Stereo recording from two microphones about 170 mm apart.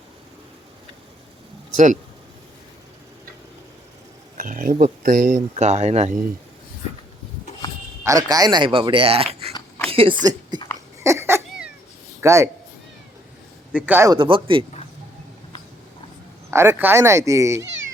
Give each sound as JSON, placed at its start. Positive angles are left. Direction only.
{"t": 1.7, "sound": "speech", "side_deg": -45}
{"t": 4.4, "sound": "speech", "side_deg": -50}
{"t": 8.0, "sound": "speech", "side_deg": -20}
{"t": 9.5, "sound": "a sound", "side_deg": 20}
{"t": 9.9, "sound": "speech", "side_deg": -30}
{"t": 10.5, "sound": "hiccup", "side_deg": -25}
{"t": 11.0, "sound": "cat", "side_deg": -15}
{"t": 12.2, "sound": "speech", "side_deg": -15}
{"t": 13.7, "sound": "speech", "side_deg": -10}
{"t": 14.1, "sound": "speech", "side_deg": -30}
{"t": 16.5, "sound": "speech", "side_deg": -15}